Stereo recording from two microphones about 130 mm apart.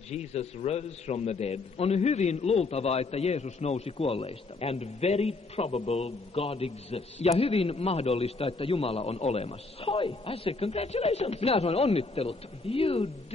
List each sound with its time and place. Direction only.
0.1 s a man's voice: 55° left (ahead or behind)